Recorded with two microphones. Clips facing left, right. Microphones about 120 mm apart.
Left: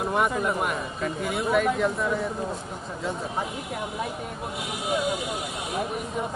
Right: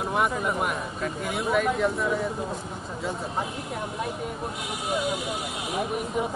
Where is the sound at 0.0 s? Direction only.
Centre (ahead or behind).